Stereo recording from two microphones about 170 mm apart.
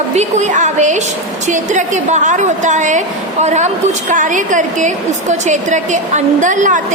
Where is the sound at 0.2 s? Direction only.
45° right (ahead or behind).